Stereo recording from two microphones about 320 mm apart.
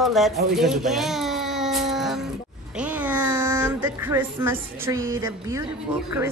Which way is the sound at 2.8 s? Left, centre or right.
Centre.